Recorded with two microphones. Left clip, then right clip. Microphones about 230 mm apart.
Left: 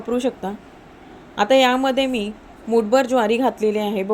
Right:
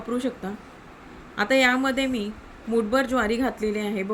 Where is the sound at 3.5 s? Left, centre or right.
Right.